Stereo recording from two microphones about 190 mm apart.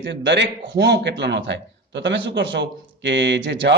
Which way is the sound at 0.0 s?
70° right (ahead or behind).